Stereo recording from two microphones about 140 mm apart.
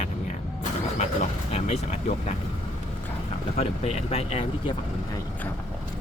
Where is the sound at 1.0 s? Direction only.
50° left (ahead or behind).